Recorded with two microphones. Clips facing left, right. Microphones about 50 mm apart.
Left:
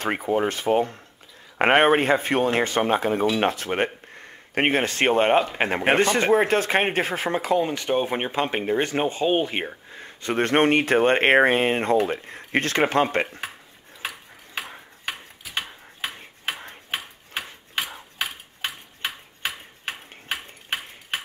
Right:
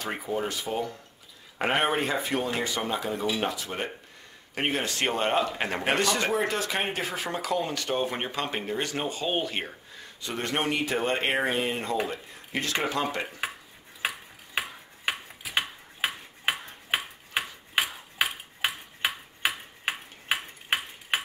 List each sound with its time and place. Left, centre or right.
0.0 s speech: left
7.6 s speech: left
10.0 s speech: left
14.0 s tick-tock: centre
15.0 s a sound: centre
16.9 s tick-tock: centre